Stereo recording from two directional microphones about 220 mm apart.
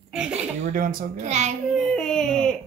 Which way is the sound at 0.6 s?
40° right (ahead or behind).